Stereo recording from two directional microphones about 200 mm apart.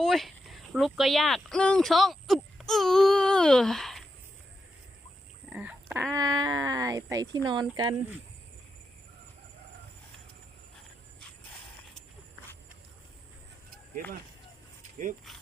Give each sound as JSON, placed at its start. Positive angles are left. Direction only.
{"t": 0.0, "sound": "speech", "side_deg": 0}
{"t": 5.5, "sound": "duck", "side_deg": -5}
{"t": 6.1, "sound": "speech", "side_deg": -20}
{"t": 15.3, "sound": "a sound", "side_deg": 0}